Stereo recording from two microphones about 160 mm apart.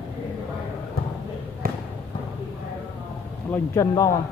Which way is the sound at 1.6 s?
70° right (ahead or behind).